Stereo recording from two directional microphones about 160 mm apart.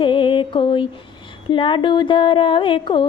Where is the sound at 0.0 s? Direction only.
30° left (ahead or behind).